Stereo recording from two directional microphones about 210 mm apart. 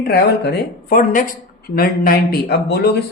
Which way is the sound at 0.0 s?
50° left (ahead or behind).